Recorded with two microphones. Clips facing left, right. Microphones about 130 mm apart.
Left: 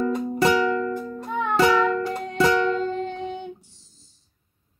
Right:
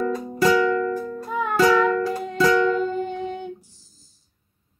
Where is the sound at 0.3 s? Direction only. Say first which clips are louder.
Right 3 dB; 20° left (ahead or behind).